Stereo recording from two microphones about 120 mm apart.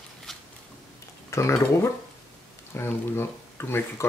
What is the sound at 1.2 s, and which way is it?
Speech, 25° left (ahead or behind).